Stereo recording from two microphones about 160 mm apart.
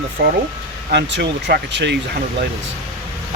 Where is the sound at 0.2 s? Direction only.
90° right.